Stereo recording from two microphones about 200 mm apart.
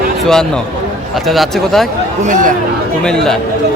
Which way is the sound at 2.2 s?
40° right (ahead or behind).